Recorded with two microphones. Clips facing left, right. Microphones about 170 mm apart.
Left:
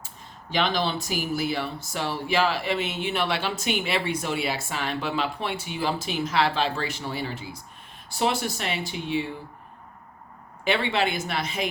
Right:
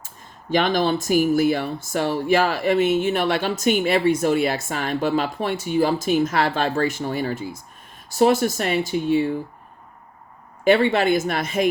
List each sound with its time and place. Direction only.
0.5 s speech: 50° right (ahead or behind)
10.6 s speech: 45° right (ahead or behind)